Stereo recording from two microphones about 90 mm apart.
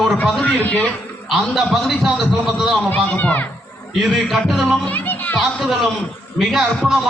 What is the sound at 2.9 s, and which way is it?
Speech, 15° left (ahead or behind).